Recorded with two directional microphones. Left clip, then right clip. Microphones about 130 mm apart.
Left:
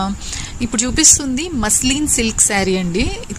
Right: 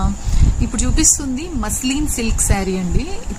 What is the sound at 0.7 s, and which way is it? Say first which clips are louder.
Speech: left 4 dB; 35° left (ahead or behind).